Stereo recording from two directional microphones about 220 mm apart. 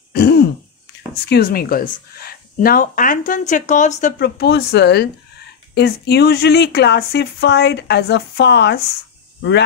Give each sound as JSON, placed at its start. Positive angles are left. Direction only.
{"t": 0.1, "sound": "throat clearing", "side_deg": 45}
{"t": 1.3, "sound": "speech", "side_deg": 40}
{"t": 4.4, "sound": "speech", "side_deg": 45}